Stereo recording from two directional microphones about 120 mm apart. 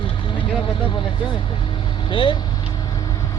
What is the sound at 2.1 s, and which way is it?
Speech, 45° left (ahead or behind).